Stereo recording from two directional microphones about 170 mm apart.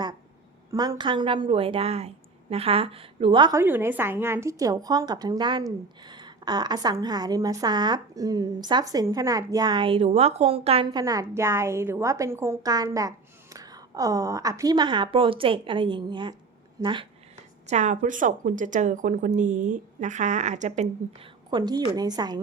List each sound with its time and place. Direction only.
0.7 s a woman's voice: 20° right (ahead or behind)
3.6 s a woman's voice: 10° right (ahead or behind); by 11.0 s 35° right (ahead or behind)
11.0 s a woman's voice: 20° right (ahead or behind)
17.7 s a woman's voice: 45° right (ahead or behind)
21.5 s a woman's voice: 25° right (ahead or behind)